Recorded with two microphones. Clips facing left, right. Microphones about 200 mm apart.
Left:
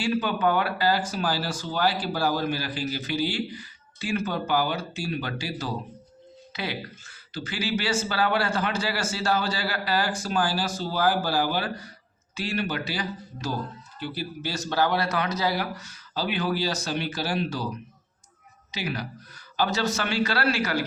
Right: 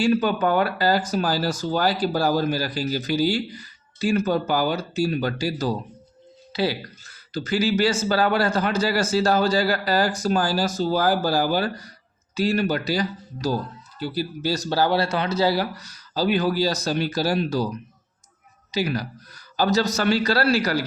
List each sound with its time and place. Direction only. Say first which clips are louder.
0.0 s speech: right 4 dB; 45° right (ahead or behind)
18.7 s speech: right 7 dB; 40° right (ahead or behind)